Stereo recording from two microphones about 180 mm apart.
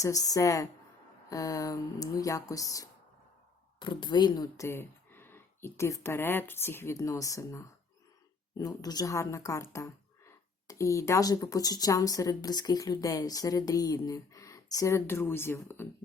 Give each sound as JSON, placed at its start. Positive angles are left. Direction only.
{"t": 0.0, "sound": "speech", "side_deg": 20}